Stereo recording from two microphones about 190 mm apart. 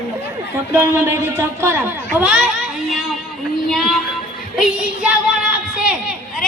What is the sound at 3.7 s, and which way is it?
Child singing, centre (ahead or behind).